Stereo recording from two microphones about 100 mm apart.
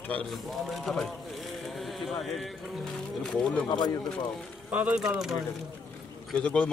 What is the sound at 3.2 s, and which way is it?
Speech, 10° left (ahead or behind).